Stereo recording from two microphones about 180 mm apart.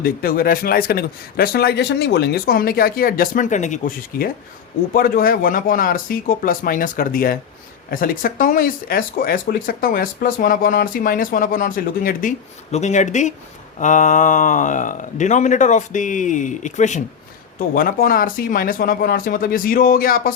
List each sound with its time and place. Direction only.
0.0 s speech: 55° left (ahead or behind)
17.7 s speech: 50° left (ahead or behind)